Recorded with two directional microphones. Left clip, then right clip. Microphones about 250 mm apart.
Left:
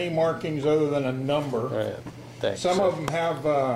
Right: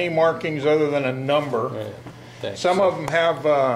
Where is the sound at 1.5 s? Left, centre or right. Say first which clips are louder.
Right 2 dB; right.